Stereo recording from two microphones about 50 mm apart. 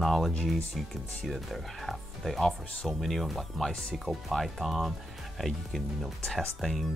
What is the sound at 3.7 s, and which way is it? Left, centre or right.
Speech, centre.